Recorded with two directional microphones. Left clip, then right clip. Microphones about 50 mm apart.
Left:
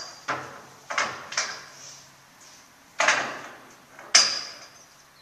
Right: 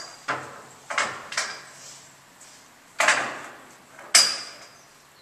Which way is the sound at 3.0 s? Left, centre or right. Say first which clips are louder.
Right 1 dB; centre.